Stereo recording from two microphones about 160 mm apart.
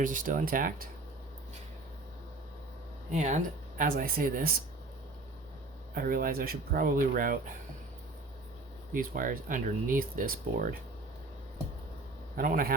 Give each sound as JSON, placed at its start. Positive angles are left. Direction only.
{"t": 0.0, "sound": "speech", "side_deg": -55}
{"t": 3.1, "sound": "speech", "side_deg": -45}
{"t": 5.9, "sound": "speech", "side_deg": -65}
{"t": 8.9, "sound": "speech", "side_deg": -60}
{"t": 12.4, "sound": "speech", "side_deg": -60}